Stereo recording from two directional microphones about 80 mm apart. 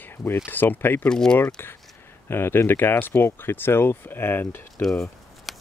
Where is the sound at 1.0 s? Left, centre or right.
Centre.